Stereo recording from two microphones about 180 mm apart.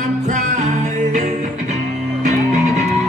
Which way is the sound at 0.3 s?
40° right (ahead or behind).